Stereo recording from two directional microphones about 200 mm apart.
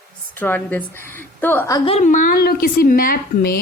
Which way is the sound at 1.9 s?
40° left (ahead or behind).